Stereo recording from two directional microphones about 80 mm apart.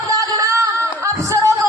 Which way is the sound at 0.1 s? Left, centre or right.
Right.